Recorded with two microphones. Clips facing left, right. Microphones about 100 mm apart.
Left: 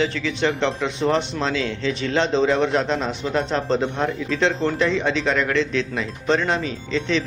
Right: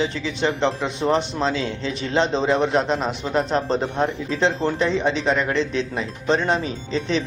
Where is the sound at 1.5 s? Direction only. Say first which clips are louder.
Left 2 dB; 35° right (ahead or behind).